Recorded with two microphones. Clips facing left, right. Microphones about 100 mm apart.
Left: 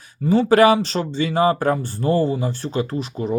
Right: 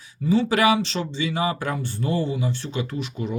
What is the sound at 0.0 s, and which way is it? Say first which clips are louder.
Speech: left 3 dB; 50° left (ahead or behind).